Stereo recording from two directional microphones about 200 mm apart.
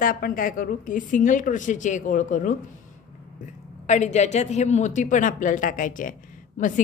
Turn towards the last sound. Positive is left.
turn(degrees=40)  # may be behind; listen again after turning